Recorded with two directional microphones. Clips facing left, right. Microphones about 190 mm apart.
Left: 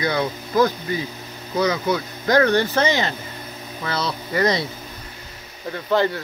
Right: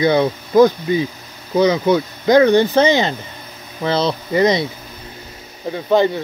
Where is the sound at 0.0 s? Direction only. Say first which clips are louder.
Right 8 dB; 25° right (ahead or behind).